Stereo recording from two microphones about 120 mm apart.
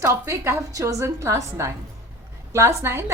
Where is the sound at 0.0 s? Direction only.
20° right (ahead or behind).